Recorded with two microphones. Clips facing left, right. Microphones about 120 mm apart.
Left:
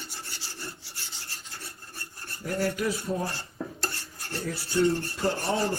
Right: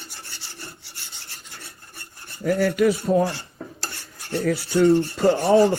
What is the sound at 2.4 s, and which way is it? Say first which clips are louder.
Filing: right 9 dB; 75° right (ahead or behind).